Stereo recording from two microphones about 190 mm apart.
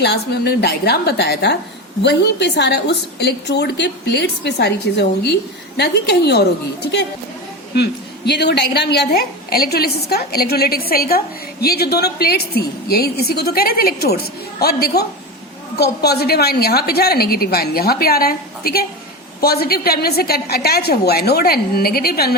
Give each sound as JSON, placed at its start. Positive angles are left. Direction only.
{"t": 0.0, "sound": "a woman's voice", "side_deg": 60}
{"t": 7.8, "sound": "a woman's voice", "side_deg": 60}